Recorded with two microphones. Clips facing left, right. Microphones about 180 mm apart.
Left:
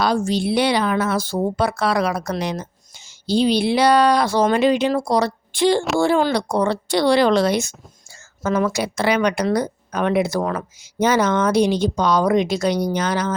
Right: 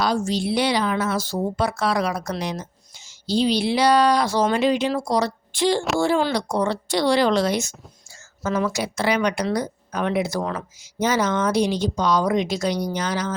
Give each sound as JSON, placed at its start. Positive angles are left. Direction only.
{"t": 0.0, "sound": "speech", "side_deg": 55}